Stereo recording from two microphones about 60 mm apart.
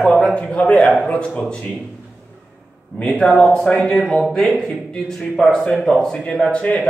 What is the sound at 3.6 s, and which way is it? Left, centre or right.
A man's voice, centre.